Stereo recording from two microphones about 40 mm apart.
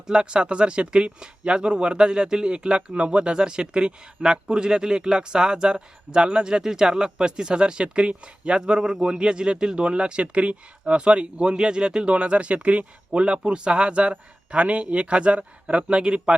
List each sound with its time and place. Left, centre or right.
0.1 s speech: right